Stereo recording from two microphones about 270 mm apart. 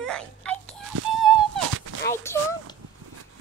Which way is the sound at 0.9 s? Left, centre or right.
Right.